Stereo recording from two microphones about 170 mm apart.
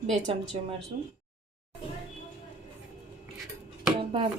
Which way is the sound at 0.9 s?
60° right (ahead or behind).